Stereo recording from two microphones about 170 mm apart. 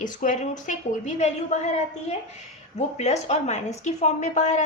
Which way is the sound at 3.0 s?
40° left (ahead or behind).